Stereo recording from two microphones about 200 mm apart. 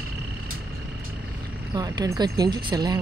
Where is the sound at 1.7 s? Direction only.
20° right (ahead or behind).